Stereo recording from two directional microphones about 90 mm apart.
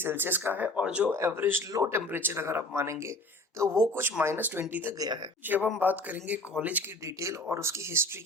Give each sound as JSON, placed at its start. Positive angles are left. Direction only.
{"t": 0.0, "sound": "speech", "side_deg": -25}
{"t": 1.1, "sound": "speech", "side_deg": -25}
{"t": 4.9, "sound": "speech", "side_deg": -50}
{"t": 5.5, "sound": "speech", "side_deg": -20}
{"t": 7.4, "sound": "speech", "side_deg": -30}